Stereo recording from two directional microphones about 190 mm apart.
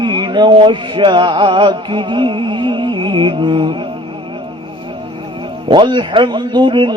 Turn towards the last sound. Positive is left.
turn(degrees=-25)  # may be behind; listen again after turning